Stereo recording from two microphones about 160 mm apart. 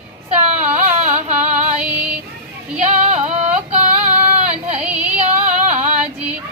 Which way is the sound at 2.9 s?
40° right (ahead or behind).